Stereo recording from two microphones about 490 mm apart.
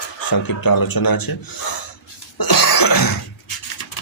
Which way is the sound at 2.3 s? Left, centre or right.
Left.